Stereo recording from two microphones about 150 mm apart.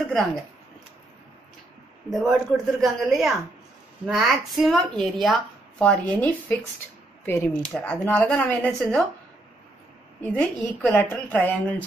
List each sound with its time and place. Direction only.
2.0 s a woman's voice: centre (ahead or behind)
10.3 s speech: 10° left (ahead or behind)